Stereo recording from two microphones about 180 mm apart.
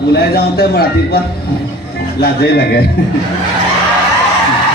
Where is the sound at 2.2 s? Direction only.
65° left (ahead or behind).